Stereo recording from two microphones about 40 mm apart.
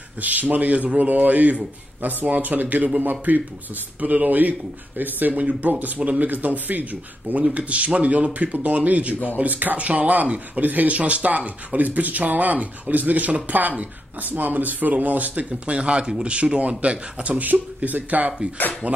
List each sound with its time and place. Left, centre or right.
0.2 s speech: right
5.3 s speech: right
5.7 s speech: right
10.6 s speech: right
17.7 s speech: right